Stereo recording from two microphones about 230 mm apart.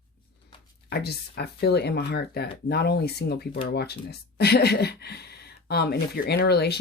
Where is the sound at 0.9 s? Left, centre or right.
Left.